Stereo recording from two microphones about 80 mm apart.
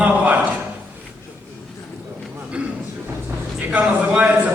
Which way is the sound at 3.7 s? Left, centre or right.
Centre.